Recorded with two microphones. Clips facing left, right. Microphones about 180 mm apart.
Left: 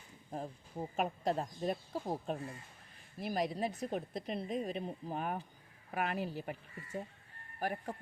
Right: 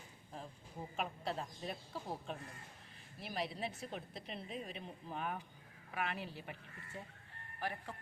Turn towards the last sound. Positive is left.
turn(degrees=45)  # may be behind; listen again after turning